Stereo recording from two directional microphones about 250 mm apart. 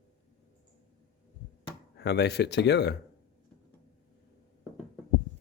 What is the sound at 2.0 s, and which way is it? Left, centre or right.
Speech, left.